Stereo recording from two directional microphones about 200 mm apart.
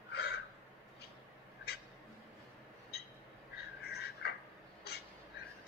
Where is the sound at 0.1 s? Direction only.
55° left (ahead or behind).